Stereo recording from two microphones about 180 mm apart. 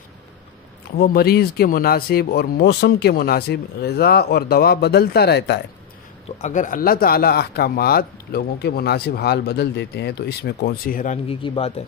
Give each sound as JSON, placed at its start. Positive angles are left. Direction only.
{"t": 0.9, "sound": "speech", "side_deg": 60}
{"t": 6.3, "sound": "speech", "side_deg": 45}
{"t": 11.2, "sound": "speech", "side_deg": 30}